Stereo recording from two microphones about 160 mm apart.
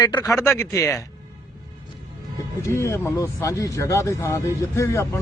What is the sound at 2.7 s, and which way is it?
Speech, 15° left (ahead or behind).